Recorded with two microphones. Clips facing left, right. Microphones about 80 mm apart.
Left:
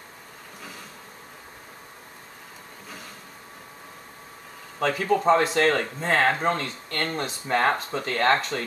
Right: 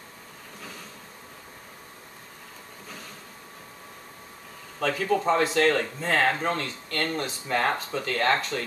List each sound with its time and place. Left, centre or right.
4.7 s speech: left